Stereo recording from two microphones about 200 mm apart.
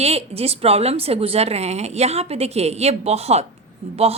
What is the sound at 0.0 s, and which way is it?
A woman's voice, 30° right (ahead or behind).